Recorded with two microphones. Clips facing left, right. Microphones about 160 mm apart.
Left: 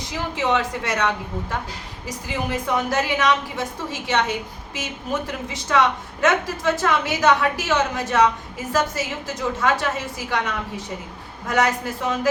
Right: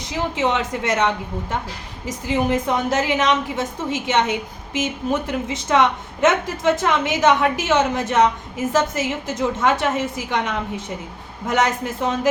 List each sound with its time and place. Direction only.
0.3 s a woman's voice: 20° right (ahead or behind)